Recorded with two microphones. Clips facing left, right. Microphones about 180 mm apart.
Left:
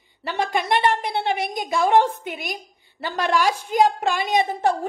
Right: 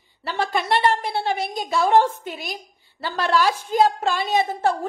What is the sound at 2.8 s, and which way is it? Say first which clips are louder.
A woman's voice: even; 15° left (ahead or behind).